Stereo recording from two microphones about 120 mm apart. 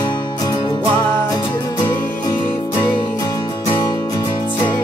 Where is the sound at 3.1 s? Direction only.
30° left (ahead or behind).